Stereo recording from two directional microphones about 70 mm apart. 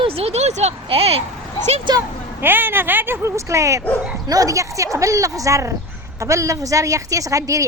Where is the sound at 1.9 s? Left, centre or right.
Right.